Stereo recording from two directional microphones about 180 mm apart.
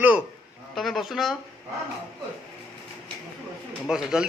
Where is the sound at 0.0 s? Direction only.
10° right (ahead or behind).